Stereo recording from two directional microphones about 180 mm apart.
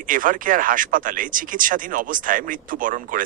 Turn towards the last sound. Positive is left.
turn(degrees=-50)  # may be behind; listen again after turning